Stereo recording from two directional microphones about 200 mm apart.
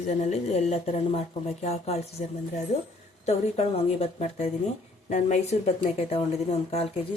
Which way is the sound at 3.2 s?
30° left (ahead or behind).